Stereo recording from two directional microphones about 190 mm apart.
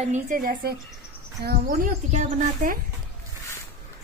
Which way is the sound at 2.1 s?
40° right (ahead or behind).